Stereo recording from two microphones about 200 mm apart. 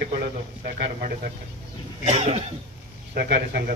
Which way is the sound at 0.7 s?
55° right (ahead or behind).